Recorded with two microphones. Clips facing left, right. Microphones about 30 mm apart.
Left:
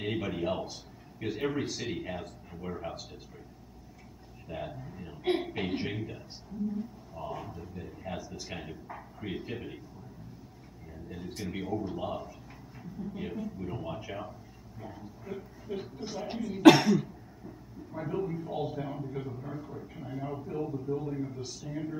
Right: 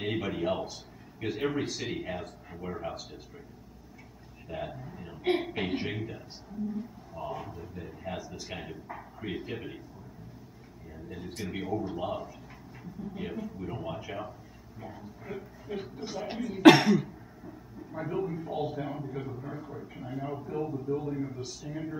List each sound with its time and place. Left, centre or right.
0.0 s a sound: centre
1.2 s a man's voice: centre
4.5 s a man's voice: centre
11.1 s a man's voice: centre